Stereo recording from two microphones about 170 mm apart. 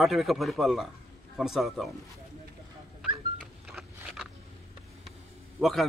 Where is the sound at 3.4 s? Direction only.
Centre (ahead or behind).